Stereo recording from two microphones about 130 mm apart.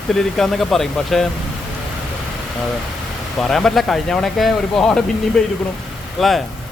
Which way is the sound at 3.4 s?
5° left (ahead or behind).